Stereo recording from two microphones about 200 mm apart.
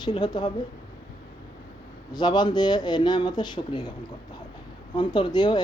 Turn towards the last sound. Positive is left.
turn(degrees=20)  # may be behind; listen again after turning